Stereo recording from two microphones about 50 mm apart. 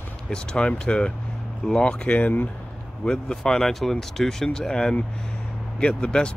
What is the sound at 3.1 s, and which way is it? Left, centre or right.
Speech, centre.